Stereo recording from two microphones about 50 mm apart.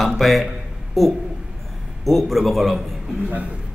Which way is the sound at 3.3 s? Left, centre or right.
Right.